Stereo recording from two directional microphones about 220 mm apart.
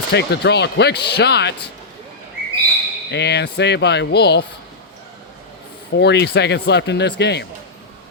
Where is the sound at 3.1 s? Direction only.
50° left (ahead or behind).